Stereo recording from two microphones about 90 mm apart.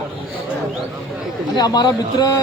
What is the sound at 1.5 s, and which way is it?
Speech, 50° left (ahead or behind).